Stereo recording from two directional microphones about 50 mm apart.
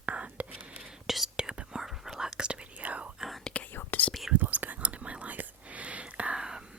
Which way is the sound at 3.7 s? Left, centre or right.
Left.